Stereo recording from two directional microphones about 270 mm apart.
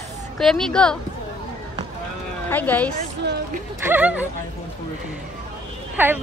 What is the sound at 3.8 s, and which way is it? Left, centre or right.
Speech, centre.